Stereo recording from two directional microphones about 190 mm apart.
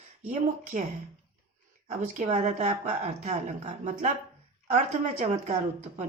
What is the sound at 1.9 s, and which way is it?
A woman's voice, 40° right (ahead or behind).